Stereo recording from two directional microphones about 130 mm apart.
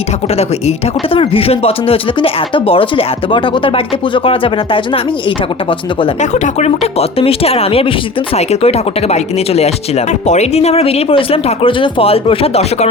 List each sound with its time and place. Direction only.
1.1 s speech: 45° left (ahead or behind)
6.3 s speech: 60° left (ahead or behind)
7.2 s speech: 45° left (ahead or behind)